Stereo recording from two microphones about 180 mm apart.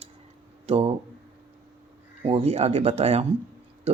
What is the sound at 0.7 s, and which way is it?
Speech, 35° right (ahead or behind).